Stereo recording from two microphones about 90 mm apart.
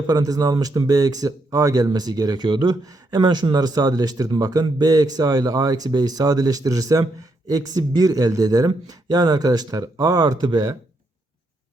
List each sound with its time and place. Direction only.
0.1 s speech: 45° right (ahead or behind)
2.8 s speech: 45° right (ahead or behind)